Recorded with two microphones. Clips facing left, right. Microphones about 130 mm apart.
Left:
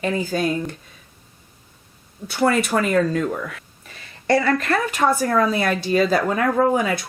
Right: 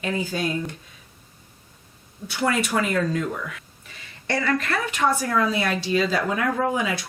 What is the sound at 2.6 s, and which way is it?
Speech, 50° left (ahead or behind).